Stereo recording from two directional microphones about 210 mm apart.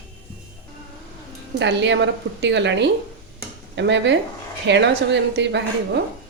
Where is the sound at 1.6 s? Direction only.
55° right (ahead or behind).